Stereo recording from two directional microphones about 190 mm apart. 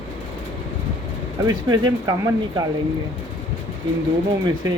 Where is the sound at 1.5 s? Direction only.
20° right (ahead or behind).